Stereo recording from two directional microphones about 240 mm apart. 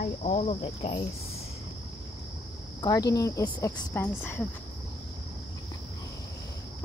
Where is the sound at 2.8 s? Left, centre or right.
Centre.